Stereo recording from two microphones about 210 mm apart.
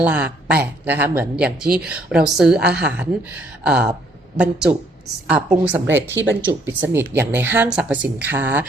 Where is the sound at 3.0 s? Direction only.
5° right (ahead or behind).